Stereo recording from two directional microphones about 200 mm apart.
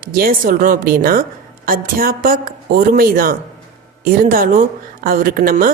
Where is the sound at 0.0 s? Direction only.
45° right (ahead or behind).